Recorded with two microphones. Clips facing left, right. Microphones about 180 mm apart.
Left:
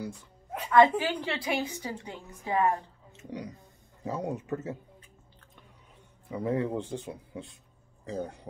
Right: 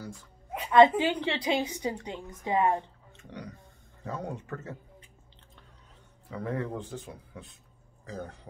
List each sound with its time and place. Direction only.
0.7 s a woman's voice: 25° right (ahead or behind)
3.2 s speech: 20° left (ahead or behind)
6.3 s speech: 20° left (ahead or behind)